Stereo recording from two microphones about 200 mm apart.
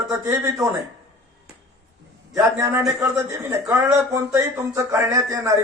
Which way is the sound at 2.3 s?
15° right (ahead or behind).